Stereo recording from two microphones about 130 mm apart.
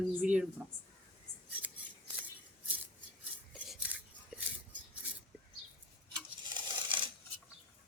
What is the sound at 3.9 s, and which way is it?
Scissors, 10° right (ahead or behind).